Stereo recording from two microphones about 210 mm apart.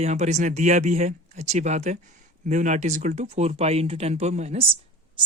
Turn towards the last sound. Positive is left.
turn(degrees=-25)  # may be behind; listen again after turning